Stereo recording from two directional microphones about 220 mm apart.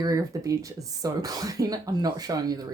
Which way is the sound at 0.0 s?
15° right (ahead or behind).